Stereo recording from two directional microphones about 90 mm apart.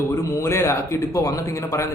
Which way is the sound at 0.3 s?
30° left (ahead or behind).